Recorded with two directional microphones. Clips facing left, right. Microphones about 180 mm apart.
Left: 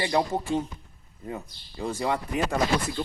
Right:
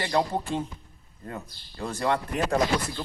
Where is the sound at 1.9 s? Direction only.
10° left (ahead or behind).